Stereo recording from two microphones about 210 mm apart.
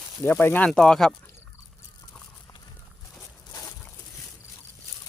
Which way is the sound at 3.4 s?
20° left (ahead or behind).